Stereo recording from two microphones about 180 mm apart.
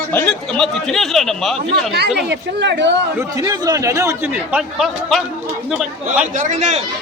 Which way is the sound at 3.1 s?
15° right (ahead or behind).